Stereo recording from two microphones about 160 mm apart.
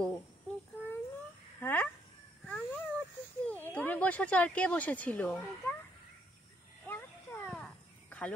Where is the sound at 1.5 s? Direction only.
10° left (ahead or behind).